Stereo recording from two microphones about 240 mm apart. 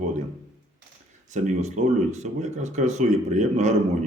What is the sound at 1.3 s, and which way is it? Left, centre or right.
A man's voice, right.